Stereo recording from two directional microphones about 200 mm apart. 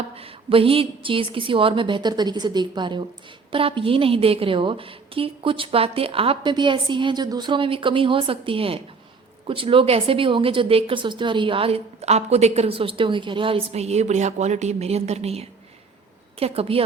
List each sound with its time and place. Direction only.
0.2 s speech: 30° right (ahead or behind)